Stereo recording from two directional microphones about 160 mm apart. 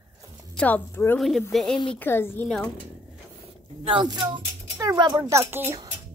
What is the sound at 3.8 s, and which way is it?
A child's voice, 30° right (ahead or behind).